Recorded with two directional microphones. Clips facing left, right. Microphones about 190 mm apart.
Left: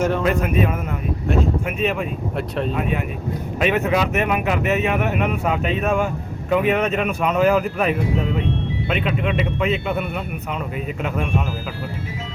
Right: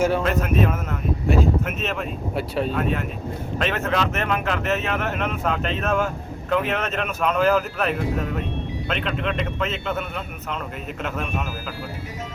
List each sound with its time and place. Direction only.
0.0 s speech: centre (ahead or behind)
1.6 s speech: 10° left (ahead or behind)
2.3 s speech: centre (ahead or behind)
3.6 s speech: 15° left (ahead or behind)